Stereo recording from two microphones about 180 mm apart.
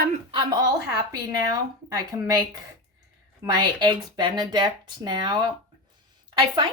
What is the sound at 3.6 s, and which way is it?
Speech, 25° right (ahead or behind).